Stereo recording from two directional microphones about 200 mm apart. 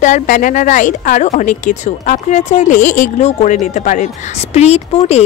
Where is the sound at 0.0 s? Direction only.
40° left (ahead or behind).